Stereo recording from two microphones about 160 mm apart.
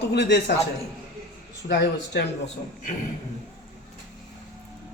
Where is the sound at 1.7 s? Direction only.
90° left.